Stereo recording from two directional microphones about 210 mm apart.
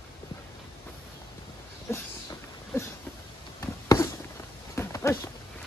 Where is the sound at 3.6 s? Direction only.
15° left (ahead or behind).